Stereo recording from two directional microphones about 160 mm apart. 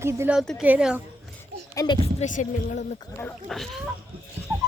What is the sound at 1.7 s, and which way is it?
Speech, 25° left (ahead or behind).